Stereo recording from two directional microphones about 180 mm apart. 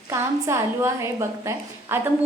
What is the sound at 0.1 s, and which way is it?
A woman's voice, 15° right (ahead or behind).